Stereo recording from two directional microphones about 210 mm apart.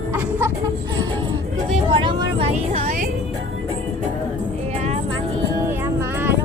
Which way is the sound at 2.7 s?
35° right (ahead or behind).